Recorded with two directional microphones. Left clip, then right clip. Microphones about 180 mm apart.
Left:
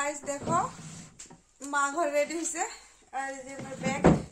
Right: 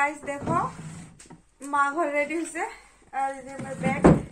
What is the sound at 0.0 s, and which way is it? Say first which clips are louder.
Speech: right 6 dB; centre (ahead or behind).